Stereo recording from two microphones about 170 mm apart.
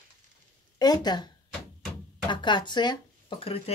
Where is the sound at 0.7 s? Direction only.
25° left (ahead or behind).